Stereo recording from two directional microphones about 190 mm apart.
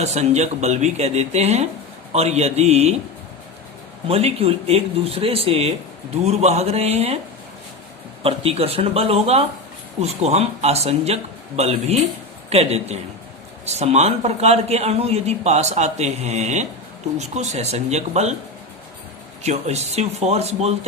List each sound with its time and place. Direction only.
0.0 s a man's voice: 35° right (ahead or behind)
4.1 s a man's voice: 30° right (ahead or behind)
8.2 s a man's voice: 30° right (ahead or behind)
19.4 s a man's voice: 35° right (ahead or behind)